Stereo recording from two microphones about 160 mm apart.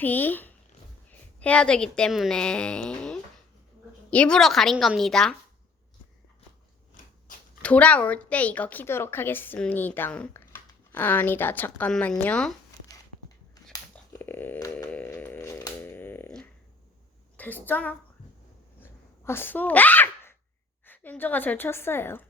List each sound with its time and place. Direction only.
0.0 s a woman's voice: 10° left (ahead or behind)
7.3 s a sound: 55° left (ahead or behind)
7.6 s speech: 10° left (ahead or behind)
14.1 s a sound: 15° left (ahead or behind)
17.3 s a woman's voice: 10° left (ahead or behind)
18.8 s sneeze: 15° left (ahead or behind)
20.8 s speech: 10° left (ahead or behind)